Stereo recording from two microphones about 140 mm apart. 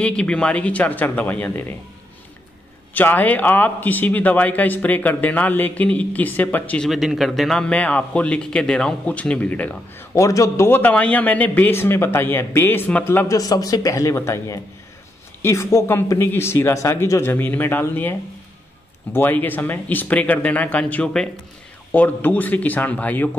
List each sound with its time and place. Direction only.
0.0 s a man's voice: 5° left (ahead or behind)
2.9 s a man's voice: 10° left (ahead or behind)
6.9 s a man's voice: centre (ahead or behind)
10.1 s a man's voice: 25° left (ahead or behind)
13.4 s a man's voice: 25° left (ahead or behind)
19.1 s a man's voice: 15° left (ahead or behind)